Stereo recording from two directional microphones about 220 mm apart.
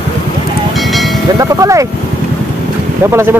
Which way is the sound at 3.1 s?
10° right (ahead or behind).